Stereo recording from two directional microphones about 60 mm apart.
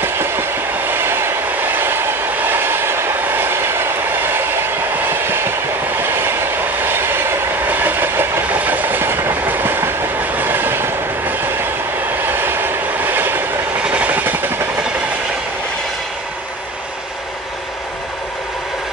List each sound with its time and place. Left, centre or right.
0.0 s train: right
7.7 s train: right
13.7 s train: centre